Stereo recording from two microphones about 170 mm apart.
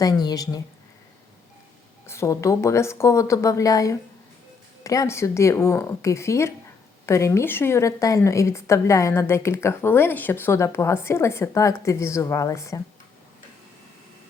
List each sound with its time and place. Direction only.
0.0 s speech: 25° left (ahead or behind)
2.0 s a woman's voice: 15° left (ahead or behind)